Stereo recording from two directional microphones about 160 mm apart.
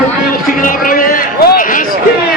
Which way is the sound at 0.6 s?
60° left (ahead or behind).